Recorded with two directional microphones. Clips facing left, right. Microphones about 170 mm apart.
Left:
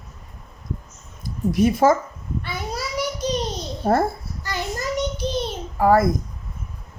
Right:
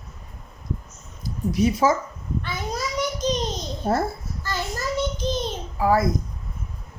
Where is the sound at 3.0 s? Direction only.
10° left (ahead or behind).